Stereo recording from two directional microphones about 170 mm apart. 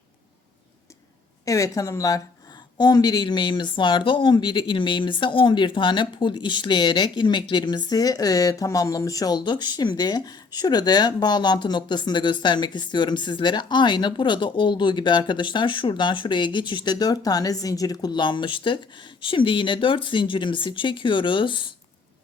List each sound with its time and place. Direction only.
1.5 s speech: 20° left (ahead or behind)